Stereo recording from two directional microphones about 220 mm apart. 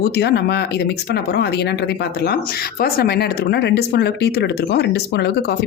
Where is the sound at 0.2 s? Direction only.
50° left (ahead or behind).